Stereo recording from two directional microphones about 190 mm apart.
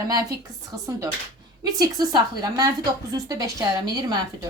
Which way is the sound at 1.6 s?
20° right (ahead or behind).